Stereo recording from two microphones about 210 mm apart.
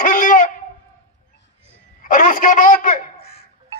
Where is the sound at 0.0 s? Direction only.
40° left (ahead or behind).